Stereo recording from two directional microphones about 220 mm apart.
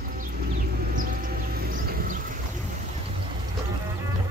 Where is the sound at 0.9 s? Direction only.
40° right (ahead or behind).